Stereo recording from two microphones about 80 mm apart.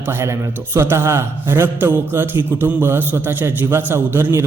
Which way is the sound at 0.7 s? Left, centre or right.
Right.